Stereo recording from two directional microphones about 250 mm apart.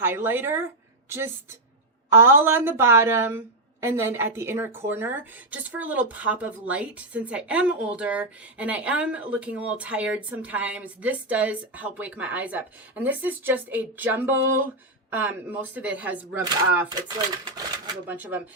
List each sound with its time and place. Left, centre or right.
0.0 s speech: centre
2.0 s a woman's voice: centre
16.4 s speech: centre